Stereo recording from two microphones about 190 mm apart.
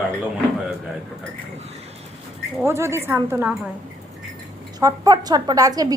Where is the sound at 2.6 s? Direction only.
15° right (ahead or behind).